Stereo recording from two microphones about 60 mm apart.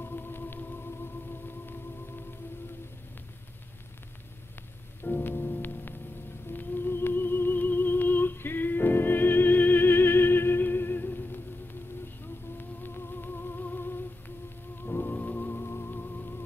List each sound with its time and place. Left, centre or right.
0.0 s music: left
5.0 s rain on surface: left
6.5 s music: left
15.6 s music: left